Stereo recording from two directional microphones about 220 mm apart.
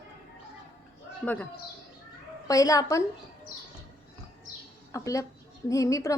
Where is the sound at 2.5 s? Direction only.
15° left (ahead or behind).